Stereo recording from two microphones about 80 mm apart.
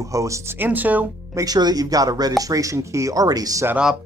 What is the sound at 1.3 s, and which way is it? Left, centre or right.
Speech, right.